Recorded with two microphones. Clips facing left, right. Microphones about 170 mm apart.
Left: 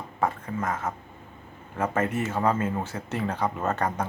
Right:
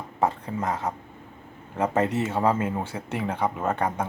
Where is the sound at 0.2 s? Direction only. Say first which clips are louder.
Right 2 dB; 20° right (ahead or behind).